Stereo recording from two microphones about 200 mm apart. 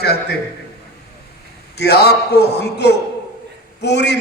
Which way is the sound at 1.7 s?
55° left (ahead or behind).